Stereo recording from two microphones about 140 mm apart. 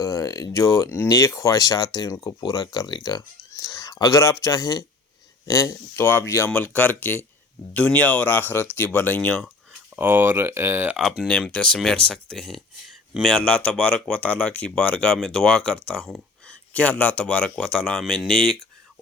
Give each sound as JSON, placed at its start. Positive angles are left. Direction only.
{"t": 0.0, "sound": "speech", "side_deg": 25}
{"t": 9.9, "sound": "speech", "side_deg": -15}
{"t": 11.2, "sound": "speech", "side_deg": 5}
{"t": 15.9, "sound": "a sound", "side_deg": 0}
{"t": 16.7, "sound": "speech", "side_deg": 10}